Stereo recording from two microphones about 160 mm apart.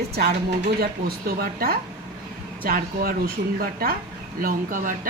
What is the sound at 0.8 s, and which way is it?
Speech, 70° right (ahead or behind).